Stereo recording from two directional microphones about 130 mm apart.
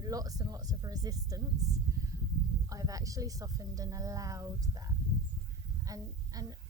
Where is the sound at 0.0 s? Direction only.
30° right (ahead or behind).